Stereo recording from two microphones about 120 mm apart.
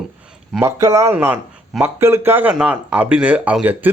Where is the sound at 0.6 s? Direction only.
25° right (ahead or behind).